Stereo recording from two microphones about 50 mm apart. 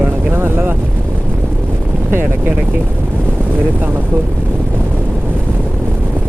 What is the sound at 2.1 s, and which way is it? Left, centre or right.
Vehicle, right.